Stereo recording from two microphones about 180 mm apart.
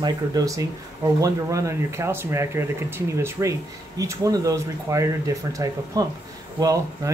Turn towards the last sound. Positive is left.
turn(degrees=-20)  # may be behind; listen again after turning